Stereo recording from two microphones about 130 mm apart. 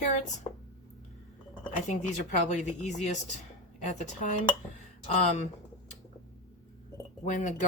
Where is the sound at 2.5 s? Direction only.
65° left (ahead or behind).